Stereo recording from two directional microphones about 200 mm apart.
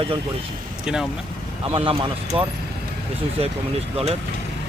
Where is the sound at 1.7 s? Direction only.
25° right (ahead or behind).